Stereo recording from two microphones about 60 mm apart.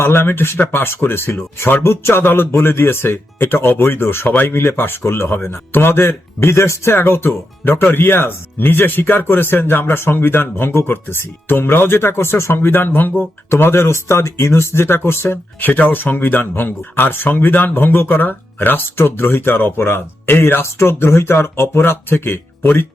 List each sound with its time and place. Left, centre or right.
0.0 s speech: left